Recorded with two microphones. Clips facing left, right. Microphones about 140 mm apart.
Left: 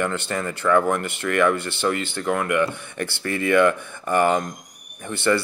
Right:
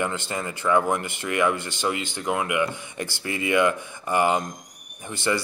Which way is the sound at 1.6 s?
15° right (ahead or behind).